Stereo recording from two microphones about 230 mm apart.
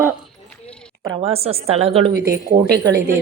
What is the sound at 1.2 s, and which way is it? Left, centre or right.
A woman's voice, right.